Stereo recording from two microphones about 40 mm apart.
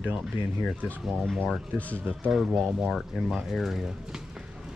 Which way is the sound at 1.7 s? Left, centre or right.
Left.